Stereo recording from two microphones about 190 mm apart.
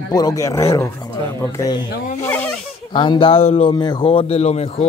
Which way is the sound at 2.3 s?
10° left (ahead or behind).